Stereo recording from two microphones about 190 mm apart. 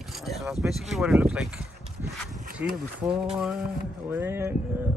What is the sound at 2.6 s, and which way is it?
Speech, 10° right (ahead or behind).